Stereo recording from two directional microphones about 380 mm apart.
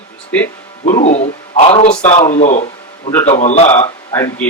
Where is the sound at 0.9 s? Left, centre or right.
Centre.